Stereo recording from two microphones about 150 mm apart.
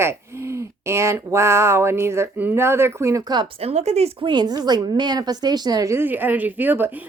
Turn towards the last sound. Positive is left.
turn(degrees=-10)  # may be behind; listen again after turning